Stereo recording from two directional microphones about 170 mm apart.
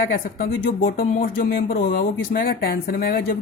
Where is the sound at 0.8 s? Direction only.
60° left (ahead or behind).